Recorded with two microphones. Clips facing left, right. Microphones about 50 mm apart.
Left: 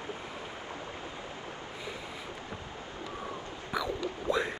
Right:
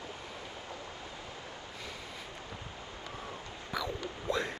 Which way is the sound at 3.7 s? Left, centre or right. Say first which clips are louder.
Left 3 dB; centre.